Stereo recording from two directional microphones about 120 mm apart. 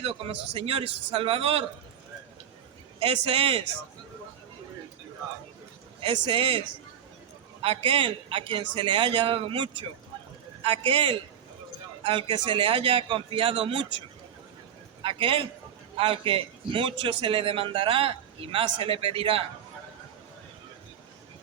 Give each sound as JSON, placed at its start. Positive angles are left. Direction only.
{"t": 0.0, "sound": "a man's voice", "side_deg": -55}
{"t": 3.0, "sound": "a man's voice", "side_deg": -55}
{"t": 6.0, "sound": "a man's voice", "side_deg": -50}
{"t": 7.6, "sound": "a man's voice", "side_deg": -50}
{"t": 15.0, "sound": "a man's voice", "side_deg": -50}